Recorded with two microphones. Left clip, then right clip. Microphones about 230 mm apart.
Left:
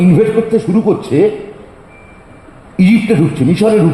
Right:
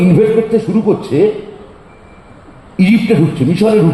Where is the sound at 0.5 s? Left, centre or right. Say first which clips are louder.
Even; left.